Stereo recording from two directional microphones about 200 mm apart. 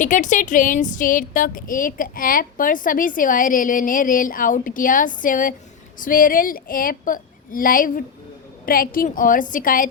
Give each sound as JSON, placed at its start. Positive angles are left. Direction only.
{"t": 0.0, "sound": "speech", "side_deg": 40}